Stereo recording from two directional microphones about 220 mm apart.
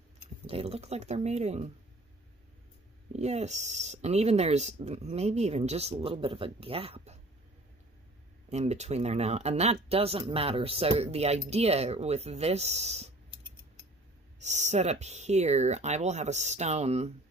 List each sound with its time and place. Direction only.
0.5 s speech: 25° right (ahead or behind)
3.1 s speech: 30° right (ahead or behind)
8.5 s speech: 30° right (ahead or behind)
14.4 s speech: 30° right (ahead or behind)